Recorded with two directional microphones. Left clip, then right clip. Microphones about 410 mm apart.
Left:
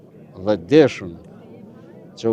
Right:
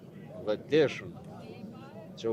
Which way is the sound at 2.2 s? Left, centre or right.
Left.